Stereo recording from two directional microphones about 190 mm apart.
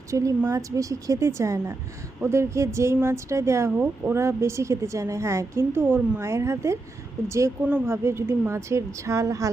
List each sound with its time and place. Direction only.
0.1 s speech: 15° right (ahead or behind)